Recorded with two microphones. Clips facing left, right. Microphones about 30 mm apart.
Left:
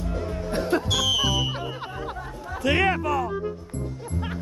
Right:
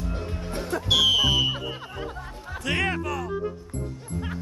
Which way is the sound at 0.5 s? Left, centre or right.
Left.